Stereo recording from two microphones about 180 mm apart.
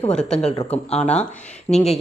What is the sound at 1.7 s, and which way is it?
Speech, 40° left (ahead or behind).